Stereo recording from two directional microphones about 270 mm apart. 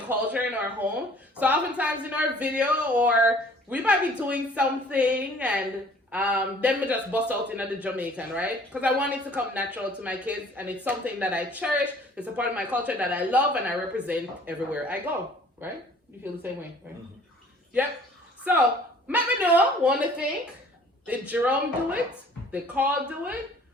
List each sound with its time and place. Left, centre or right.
0.1 s a woman's voice: centre
19.0 s speech: centre